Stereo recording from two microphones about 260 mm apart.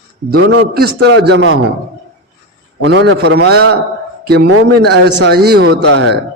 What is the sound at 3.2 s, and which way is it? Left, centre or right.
A man's voice, right.